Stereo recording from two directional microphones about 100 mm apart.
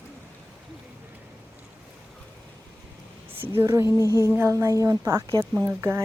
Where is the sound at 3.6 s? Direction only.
30° right (ahead or behind).